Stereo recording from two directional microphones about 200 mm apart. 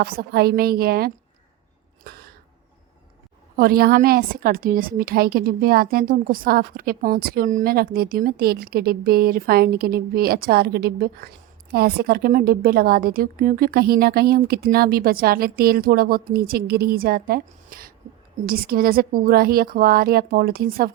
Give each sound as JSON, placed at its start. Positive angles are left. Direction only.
{"t": 0.0, "sound": "a woman's voice", "side_deg": -50}
{"t": 2.0, "sound": "cough", "side_deg": -50}
{"t": 3.6, "sound": "a woman's voice", "side_deg": -50}